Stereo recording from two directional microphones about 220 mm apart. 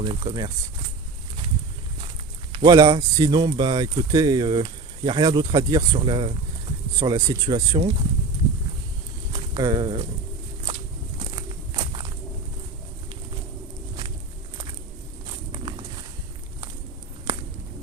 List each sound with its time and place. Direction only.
0.0 s speech: 25° right (ahead or behind)
2.5 s speech: 20° right (ahead or behind)
9.3 s speech: 20° right (ahead or behind)
11.3 s walk: 20° right (ahead or behind)
15.5 s walk: 25° right (ahead or behind)